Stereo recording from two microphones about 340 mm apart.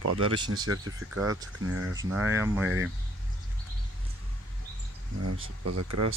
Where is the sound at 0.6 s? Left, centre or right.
Right.